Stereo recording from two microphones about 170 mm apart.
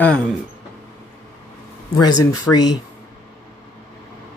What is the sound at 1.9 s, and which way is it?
Speech, 20° left (ahead or behind).